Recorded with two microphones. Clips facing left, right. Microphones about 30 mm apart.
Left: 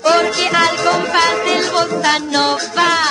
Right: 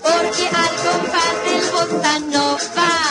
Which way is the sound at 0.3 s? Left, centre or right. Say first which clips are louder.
Left 3 dB; left.